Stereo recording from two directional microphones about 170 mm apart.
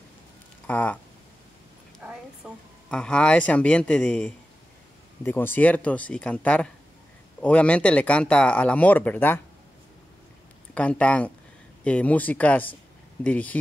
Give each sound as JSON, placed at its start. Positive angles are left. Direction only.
{"t": 0.7, "sound": "speech", "side_deg": 10}
{"t": 2.4, "sound": "speech", "side_deg": -5}
{"t": 10.7, "sound": "speech", "side_deg": 5}